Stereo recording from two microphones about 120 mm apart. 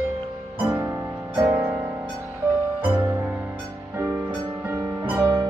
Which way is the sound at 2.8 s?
25° right (ahead or behind).